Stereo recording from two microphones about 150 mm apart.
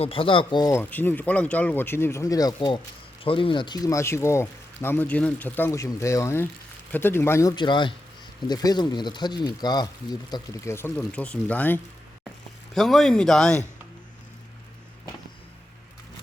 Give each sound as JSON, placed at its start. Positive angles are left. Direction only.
{"t": 0.0, "sound": "speech", "side_deg": 35}
{"t": 0.7, "sound": "speech", "side_deg": 15}
{"t": 7.5, "sound": "speech", "side_deg": 30}